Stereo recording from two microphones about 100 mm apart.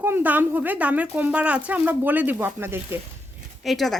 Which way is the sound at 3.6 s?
Centre (ahead or behind).